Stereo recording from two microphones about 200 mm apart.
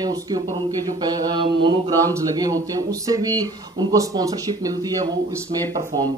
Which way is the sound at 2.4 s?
20° right (ahead or behind).